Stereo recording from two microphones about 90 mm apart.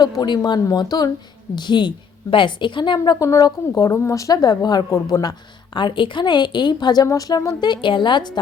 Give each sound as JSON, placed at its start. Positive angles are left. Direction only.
{"t": 0.0, "sound": "speech", "side_deg": 50}
{"t": 1.5, "sound": "a woman's voice", "side_deg": 60}
{"t": 3.2, "sound": "a woman's voice", "side_deg": 35}
{"t": 4.9, "sound": "a woman's voice", "side_deg": 35}
{"t": 5.7, "sound": "a woman's voice", "side_deg": 60}